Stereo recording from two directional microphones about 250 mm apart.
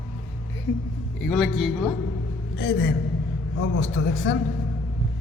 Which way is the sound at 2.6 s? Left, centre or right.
Left.